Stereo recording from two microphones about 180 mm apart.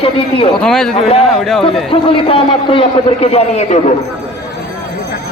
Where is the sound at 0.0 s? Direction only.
30° left (ahead or behind).